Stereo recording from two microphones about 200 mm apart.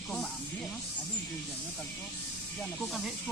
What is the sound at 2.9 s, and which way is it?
Speech, centre (ahead or behind).